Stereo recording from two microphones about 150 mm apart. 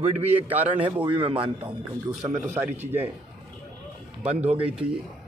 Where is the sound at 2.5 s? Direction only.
15° right (ahead or behind).